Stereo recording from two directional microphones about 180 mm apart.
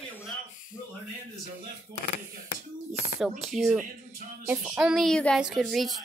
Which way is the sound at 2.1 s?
40° left (ahead or behind).